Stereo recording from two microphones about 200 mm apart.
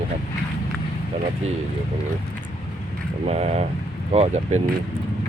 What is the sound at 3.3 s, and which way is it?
Speech, 35° right (ahead or behind).